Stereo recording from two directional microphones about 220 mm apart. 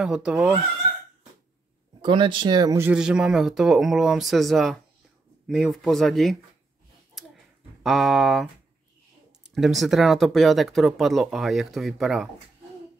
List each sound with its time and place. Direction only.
0.0 s speech: 5° right (ahead or behind)
2.0 s speech: 20° right (ahead or behind)
2.9 s speech: 5° right (ahead or behind)
7.8 s speech: centre (ahead or behind)